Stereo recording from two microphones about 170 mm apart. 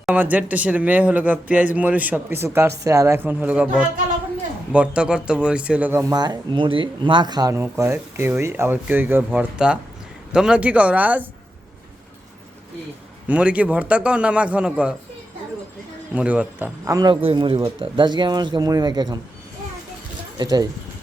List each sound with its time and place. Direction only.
0.0 s a man's voice: 10° right (ahead or behind)
13.2 s a man's voice: 5° right (ahead or behind)
16.1 s a man's voice: 10° right (ahead or behind); by 19.2 s 25° right (ahead or behind)
20.4 s speech: 25° right (ahead or behind)